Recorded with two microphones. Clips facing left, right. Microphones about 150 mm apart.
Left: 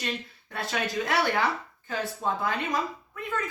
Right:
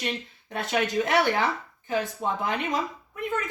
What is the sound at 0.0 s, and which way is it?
Speech, 20° right (ahead or behind).